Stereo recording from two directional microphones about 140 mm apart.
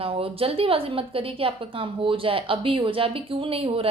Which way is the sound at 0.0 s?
40° right (ahead or behind).